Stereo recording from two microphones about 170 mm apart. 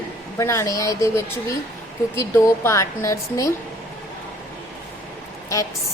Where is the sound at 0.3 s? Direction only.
15° left (ahead or behind).